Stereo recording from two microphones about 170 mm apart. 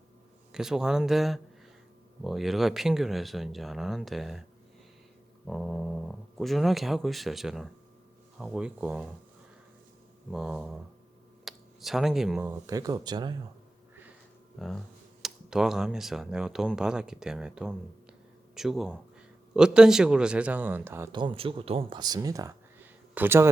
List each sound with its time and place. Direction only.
0.5 s speech: 5° right (ahead or behind)
5.5 s speech: centre (ahead or behind)
10.3 s speech: 5° right (ahead or behind)
11.4 s a sound: centre (ahead or behind)
12.4 s speech: 20° right (ahead or behind)
14.6 s a man's voice: centre (ahead or behind)
21.1 s speech: 30° right (ahead or behind); by 23.5 s 10° right (ahead or behind)